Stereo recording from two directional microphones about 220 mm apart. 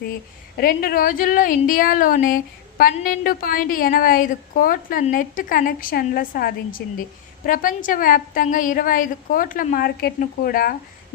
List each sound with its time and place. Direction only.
0.5 s speech: 40° left (ahead or behind)